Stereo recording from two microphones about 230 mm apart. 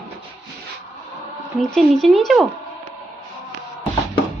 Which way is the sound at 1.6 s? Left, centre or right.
Centre.